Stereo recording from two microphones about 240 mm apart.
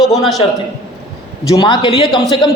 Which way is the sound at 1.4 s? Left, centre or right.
Centre.